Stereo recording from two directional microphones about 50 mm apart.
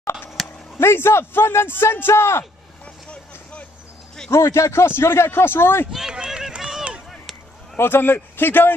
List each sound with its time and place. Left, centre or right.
0.7 s a man's voice: left
4.3 s a man's voice: left
5.9 s run: centre
7.7 s speech: left